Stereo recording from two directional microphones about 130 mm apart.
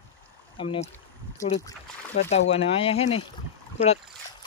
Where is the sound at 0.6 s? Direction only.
45° left (ahead or behind).